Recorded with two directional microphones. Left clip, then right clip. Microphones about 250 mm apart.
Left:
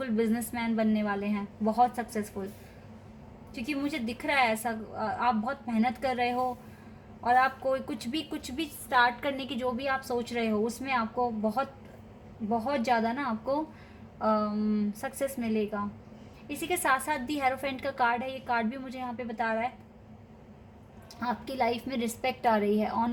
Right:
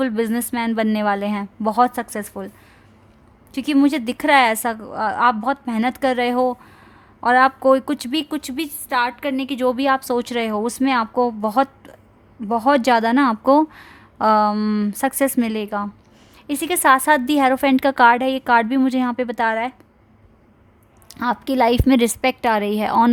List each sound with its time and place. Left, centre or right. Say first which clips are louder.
0.0 s a woman's voice: right 9 dB; right
3.5 s a woman's voice: right 15 dB; right
21.2 s a woman's voice: right 12 dB; right